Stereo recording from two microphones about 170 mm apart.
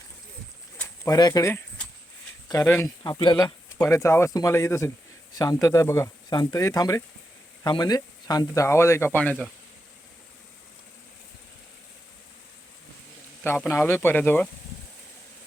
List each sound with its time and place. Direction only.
0.8 s a sound: 20° left (ahead or behind)
2.5 s speech: 15° left (ahead or behind)
3.0 s speech: 25° left (ahead or behind); by 9.5 s 10° left (ahead or behind)
13.4 s speech: 15° left (ahead or behind)